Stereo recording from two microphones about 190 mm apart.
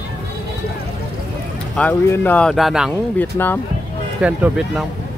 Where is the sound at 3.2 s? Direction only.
10° left (ahead or behind).